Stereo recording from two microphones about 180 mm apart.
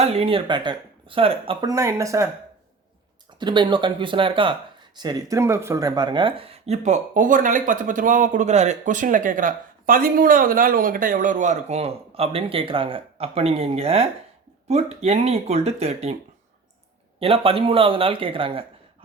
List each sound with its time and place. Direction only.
0.0 s speech: 35° right (ahead or behind)
1.7 s speech: 15° right (ahead or behind)
3.3 s speech: 25° right (ahead or behind)
17.2 s speech: 30° right (ahead or behind)